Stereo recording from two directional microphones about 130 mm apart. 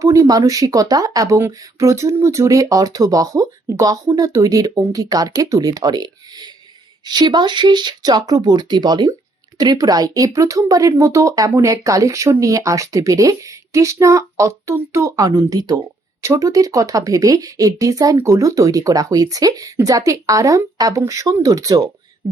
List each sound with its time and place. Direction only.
0.0 s speech: 25° right (ahead or behind)